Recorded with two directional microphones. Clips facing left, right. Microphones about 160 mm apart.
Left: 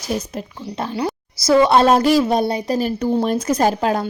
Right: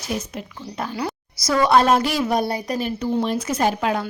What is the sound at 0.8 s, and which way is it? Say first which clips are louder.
Speech: left 4 dB; 30° left (ahead or behind).